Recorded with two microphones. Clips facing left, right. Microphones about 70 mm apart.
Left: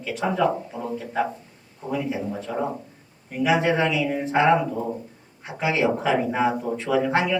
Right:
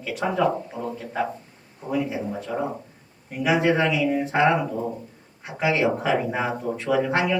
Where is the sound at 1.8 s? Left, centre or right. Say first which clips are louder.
Right 1 dB; right.